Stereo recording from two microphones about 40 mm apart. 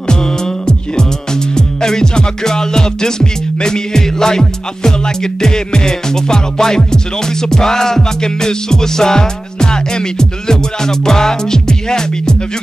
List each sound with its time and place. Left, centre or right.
0.1 s music: centre